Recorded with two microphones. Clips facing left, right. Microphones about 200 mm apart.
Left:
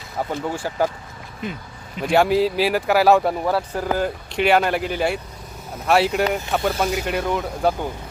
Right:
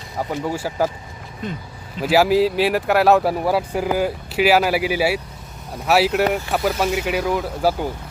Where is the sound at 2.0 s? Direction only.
5° right (ahead or behind).